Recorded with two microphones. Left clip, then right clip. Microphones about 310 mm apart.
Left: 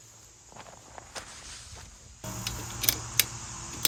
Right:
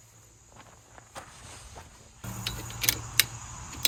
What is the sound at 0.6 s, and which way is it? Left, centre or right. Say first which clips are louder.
Walk: left 5 dB; left.